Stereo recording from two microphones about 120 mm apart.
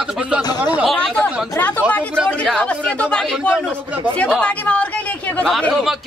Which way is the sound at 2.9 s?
10° left (ahead or behind).